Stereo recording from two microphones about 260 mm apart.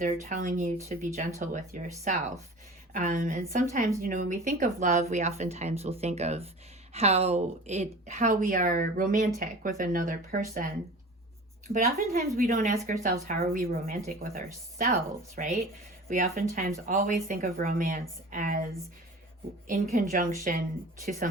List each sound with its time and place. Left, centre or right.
0.0 s a woman's voice: right
11.7 s a woman's voice: right